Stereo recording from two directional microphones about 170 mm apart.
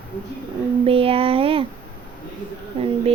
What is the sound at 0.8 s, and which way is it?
Speech, 35° right (ahead or behind).